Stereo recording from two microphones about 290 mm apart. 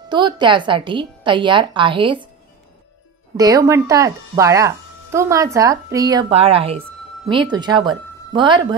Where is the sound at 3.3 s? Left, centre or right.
Centre.